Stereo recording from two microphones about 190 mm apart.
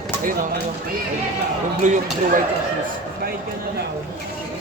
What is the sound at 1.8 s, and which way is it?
Speech, 40° right (ahead or behind).